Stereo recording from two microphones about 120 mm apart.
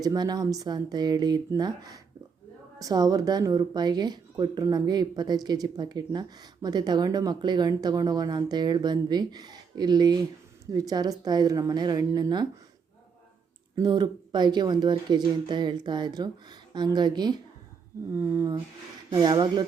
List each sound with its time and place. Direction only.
0.0 s speech: 35° right (ahead or behind)
13.7 s speech: 35° right (ahead or behind)
18.1 s speech: 20° right (ahead or behind)
19.1 s speech: 40° right (ahead or behind)